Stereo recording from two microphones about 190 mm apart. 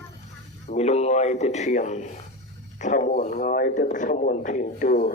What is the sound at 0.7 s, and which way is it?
Speech, 35° left (ahead or behind).